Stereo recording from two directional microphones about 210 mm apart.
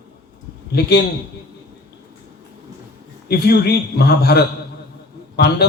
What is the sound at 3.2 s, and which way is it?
A man's voice, 50° left (ahead or behind).